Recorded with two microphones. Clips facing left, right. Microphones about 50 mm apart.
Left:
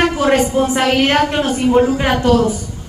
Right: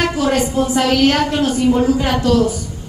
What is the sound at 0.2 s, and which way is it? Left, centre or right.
A woman's voice, left.